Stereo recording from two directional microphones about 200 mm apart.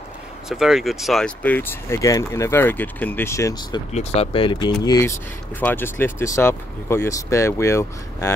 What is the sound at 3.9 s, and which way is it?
Speech, 35° left (ahead or behind).